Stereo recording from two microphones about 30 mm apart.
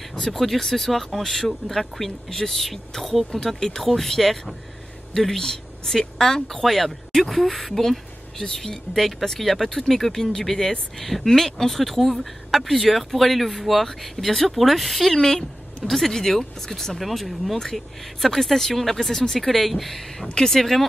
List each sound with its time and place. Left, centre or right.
0.1 s speech: centre
6.6 s speech: centre
15.1 s speech: centre
17.0 s speech: centre